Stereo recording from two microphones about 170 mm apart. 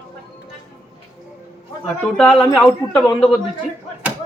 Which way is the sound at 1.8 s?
5° left (ahead or behind).